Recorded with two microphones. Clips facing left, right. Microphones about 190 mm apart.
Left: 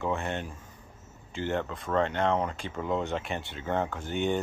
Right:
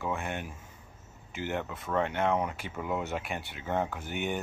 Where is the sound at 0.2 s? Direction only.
10° right (ahead or behind).